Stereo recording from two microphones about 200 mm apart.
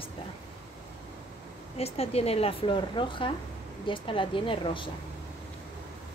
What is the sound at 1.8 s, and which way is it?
Speech, 30° left (ahead or behind).